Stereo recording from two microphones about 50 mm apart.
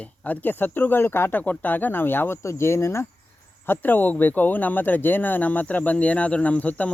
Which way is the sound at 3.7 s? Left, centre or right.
Left.